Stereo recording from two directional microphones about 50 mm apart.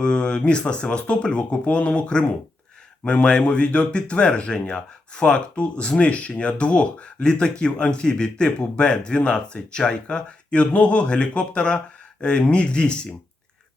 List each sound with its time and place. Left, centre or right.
0.0 s speech: centre